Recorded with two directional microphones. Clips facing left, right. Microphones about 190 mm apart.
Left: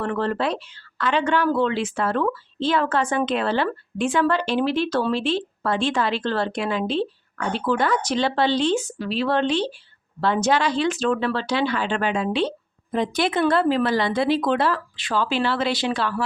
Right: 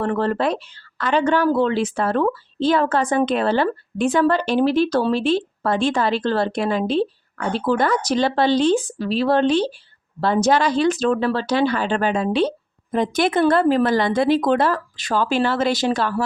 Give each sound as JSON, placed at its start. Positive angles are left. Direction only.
{"t": 0.0, "sound": "speech", "side_deg": -40}